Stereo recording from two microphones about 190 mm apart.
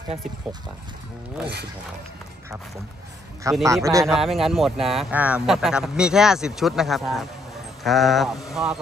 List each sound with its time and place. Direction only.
3.6 s speech: 15° right (ahead or behind)
4.0 s speech: centre (ahead or behind)